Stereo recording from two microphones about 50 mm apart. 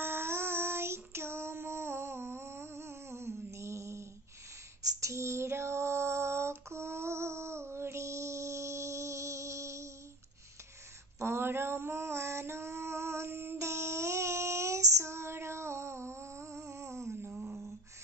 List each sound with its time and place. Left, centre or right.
0.0 s child singing: right
5.0 s female singing: right
11.1 s female singing: right
13.6 s child singing: right